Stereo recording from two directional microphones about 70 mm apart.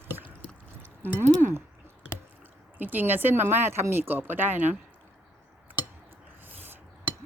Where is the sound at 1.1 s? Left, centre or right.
Right.